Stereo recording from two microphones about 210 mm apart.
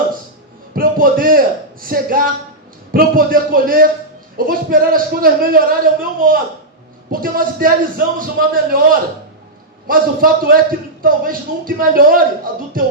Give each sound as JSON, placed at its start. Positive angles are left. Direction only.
{"t": 0.8, "sound": "a man's voice", "side_deg": -40}